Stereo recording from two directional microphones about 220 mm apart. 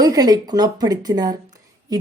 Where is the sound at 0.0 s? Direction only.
15° right (ahead or behind).